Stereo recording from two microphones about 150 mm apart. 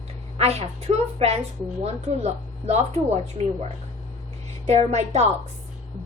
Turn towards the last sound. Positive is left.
turn(degrees=-50)  # may be behind; listen again after turning